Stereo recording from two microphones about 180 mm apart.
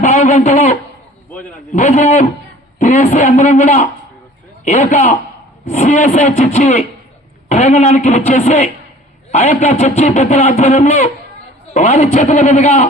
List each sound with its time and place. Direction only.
0.0 s a man's voice: 40° left (ahead or behind)